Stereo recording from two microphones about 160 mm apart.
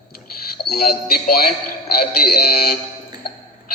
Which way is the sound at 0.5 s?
75° left (ahead or behind).